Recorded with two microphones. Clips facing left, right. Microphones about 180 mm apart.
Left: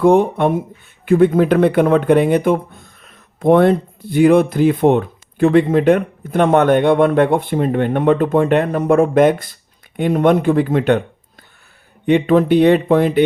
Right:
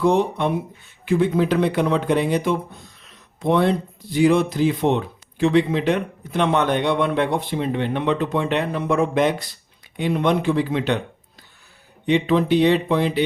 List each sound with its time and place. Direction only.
0.0 s speech: 55° left (ahead or behind)
12.0 s speech: 55° left (ahead or behind)